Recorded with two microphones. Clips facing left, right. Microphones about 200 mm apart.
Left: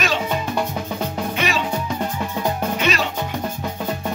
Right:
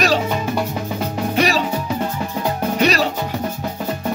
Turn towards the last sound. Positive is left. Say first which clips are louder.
# right 5 dB
turn(degrees=-35)  # may be behind; listen again after turning